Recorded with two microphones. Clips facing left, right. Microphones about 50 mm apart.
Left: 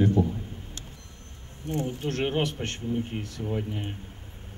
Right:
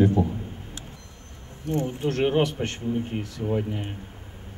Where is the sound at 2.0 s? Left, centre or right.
Centre.